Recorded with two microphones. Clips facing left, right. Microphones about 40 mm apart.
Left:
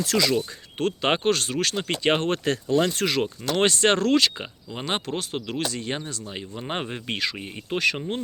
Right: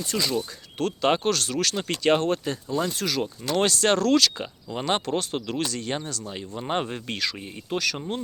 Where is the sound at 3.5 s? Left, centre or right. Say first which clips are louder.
Left 1 dB; left.